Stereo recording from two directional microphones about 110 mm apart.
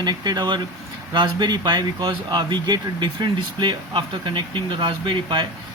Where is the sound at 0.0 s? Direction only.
40° right (ahead or behind).